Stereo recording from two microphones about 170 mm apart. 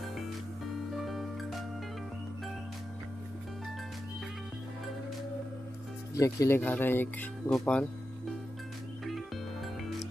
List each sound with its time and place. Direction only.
0.9 s music: centre (ahead or behind)
6.1 s speech: 20° left (ahead or behind)